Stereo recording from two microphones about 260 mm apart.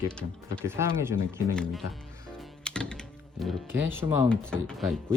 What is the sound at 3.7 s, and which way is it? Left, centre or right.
Speech, centre.